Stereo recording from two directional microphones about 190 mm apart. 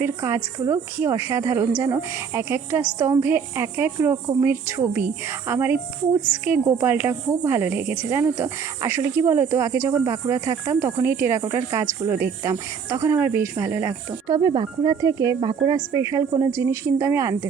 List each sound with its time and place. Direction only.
0.0 s speech: 15° right (ahead or behind)